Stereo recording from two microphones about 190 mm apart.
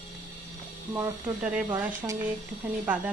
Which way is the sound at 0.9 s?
10° right (ahead or behind).